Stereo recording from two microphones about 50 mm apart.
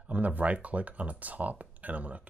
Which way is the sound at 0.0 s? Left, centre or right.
Right.